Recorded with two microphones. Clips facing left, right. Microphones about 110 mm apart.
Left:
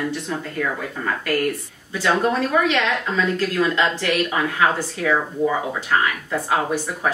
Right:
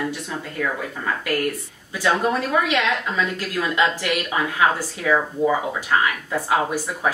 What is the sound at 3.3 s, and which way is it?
A woman's voice, 15° right (ahead or behind).